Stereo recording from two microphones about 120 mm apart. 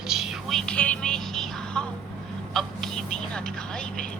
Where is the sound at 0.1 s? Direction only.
Centre (ahead or behind).